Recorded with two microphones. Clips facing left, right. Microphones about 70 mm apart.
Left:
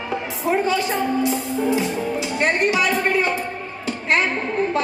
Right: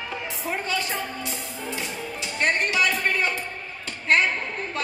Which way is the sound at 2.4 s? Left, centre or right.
Centre.